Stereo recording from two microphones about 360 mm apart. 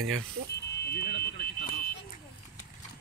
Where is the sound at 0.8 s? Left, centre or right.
Left.